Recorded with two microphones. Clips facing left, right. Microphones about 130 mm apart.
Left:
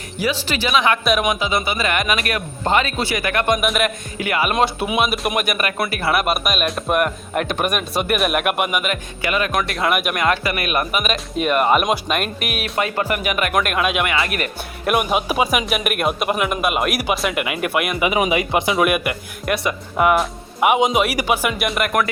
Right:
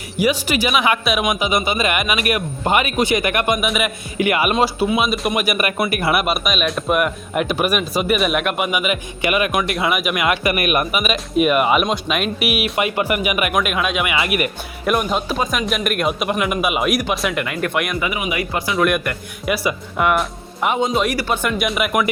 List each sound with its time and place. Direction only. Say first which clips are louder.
0.2 s speech: right 4 dB; 15° right (ahead or behind)
2.0 s speech: right 1 dB; 10° right (ahead or behind)
3.4 s a man's voice: left 1 dB; 5° right (ahead or behind)
4.2 s speech: right 3 dB; 15° right (ahead or behind)
4.9 s speech: right 1 dB; centre (ahead or behind)
6.2 s a man's voice: even; centre (ahead or behind)
9.2 s speech: right 2 dB; 15° right (ahead or behind)
9.6 s a man's voice: even; centre (ahead or behind)
14.3 s speech: right 4 dB; 10° right (ahead or behind)
14.8 s a man's voice: even; 10° left (ahead or behind)
18.2 s speech: left 5 dB; 25° left (ahead or behind)
18.8 s a man's voice: even; 5° left (ahead or behind)